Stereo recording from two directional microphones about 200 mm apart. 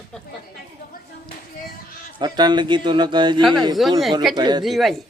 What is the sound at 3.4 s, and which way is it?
Speech, centre (ahead or behind).